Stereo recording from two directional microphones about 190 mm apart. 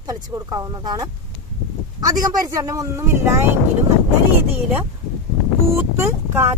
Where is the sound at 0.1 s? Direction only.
20° right (ahead or behind).